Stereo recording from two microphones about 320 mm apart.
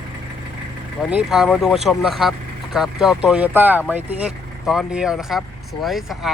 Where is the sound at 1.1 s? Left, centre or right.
Centre.